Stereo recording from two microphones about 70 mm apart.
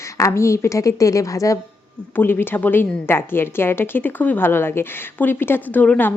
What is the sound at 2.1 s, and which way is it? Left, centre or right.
A woman's voice, left.